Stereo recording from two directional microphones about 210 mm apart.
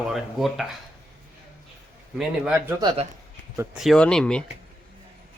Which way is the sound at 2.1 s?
5° right (ahead or behind).